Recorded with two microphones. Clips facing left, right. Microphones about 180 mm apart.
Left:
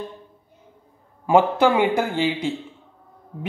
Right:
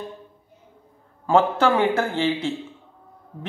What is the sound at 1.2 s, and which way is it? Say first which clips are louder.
Speech: left 2 dB; 15° left (ahead or behind).